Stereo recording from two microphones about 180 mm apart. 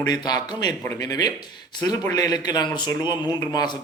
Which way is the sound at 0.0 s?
20° left (ahead or behind).